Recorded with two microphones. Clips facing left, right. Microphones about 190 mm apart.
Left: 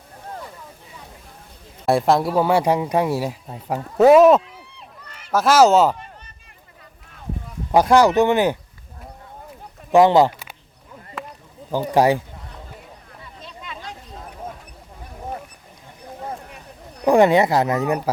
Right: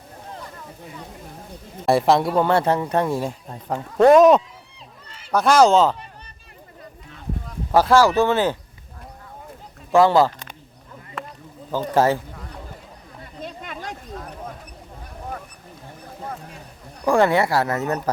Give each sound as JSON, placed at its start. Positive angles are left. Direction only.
{"t": 1.9, "sound": "speech", "side_deg": 0}
{"t": 4.4, "sound": "run", "side_deg": 60}
{"t": 5.3, "sound": "speech", "side_deg": 5}
{"t": 7.4, "sound": "speech", "side_deg": 15}
{"t": 9.9, "sound": "speech", "side_deg": 20}
{"t": 11.7, "sound": "speech", "side_deg": 15}
{"t": 13.2, "sound": "a sound", "side_deg": -50}
{"t": 17.1, "sound": "speech", "side_deg": 20}